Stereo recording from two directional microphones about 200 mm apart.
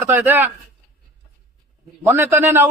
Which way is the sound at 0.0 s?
10° right (ahead or behind).